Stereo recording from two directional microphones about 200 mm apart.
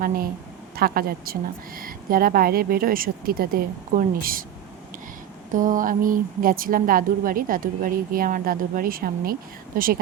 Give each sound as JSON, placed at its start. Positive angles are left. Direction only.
{"t": 0.8, "sound": "a woman's voice", "side_deg": -50}
{"t": 5.5, "sound": "a woman's voice", "side_deg": -40}